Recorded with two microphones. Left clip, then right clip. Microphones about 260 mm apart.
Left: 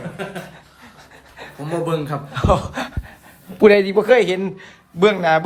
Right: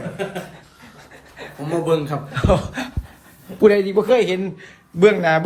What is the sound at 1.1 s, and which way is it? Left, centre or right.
Pant, centre.